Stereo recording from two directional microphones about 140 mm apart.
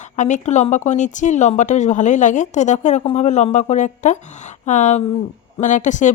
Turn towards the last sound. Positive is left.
turn(degrees=60)  # may be behind; listen again after turning